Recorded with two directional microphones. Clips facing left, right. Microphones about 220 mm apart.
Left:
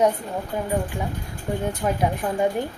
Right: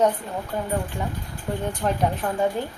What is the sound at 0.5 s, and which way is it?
A woman's voice, 10° left (ahead or behind).